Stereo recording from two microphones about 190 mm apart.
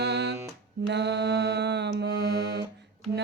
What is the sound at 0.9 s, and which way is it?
Mantra, 65° right (ahead or behind).